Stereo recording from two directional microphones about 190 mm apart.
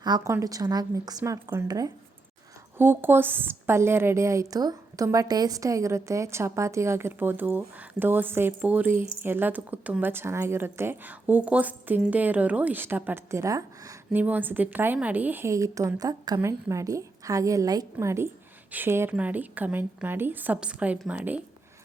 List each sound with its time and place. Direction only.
0.0 s a woman's voice: 20° right (ahead or behind)